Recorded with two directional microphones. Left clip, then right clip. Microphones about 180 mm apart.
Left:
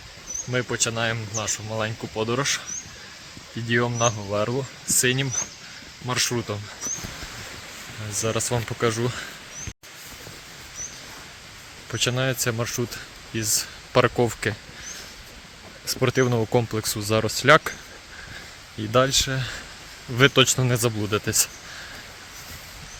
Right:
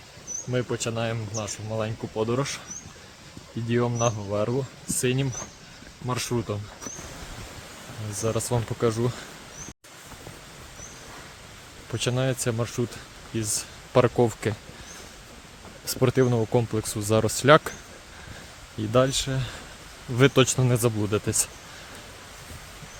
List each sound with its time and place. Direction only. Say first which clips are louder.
0.5 s speech: left 3 dB; 5° right (ahead or behind)
3.7 s speech: left 3 dB; 5° left (ahead or behind)
8.1 s speech: left 2 dB; 5° right (ahead or behind)
11.9 s speech: left 3 dB; 5° right (ahead or behind)
15.9 s speech: left 1 dB; 15° right (ahead or behind)
16.1 s speech: left 2 dB; centre (ahead or behind)
16.8 s speech: left 4 dB; 5° right (ahead or behind)
17.1 s speech: left 1 dB; 15° right (ahead or behind)
18.9 s speech: left 3 dB; centre (ahead or behind)
20.1 s speech: left 3 dB; 10° right (ahead or behind)